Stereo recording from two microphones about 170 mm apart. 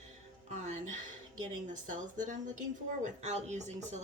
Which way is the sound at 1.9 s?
50° right (ahead or behind).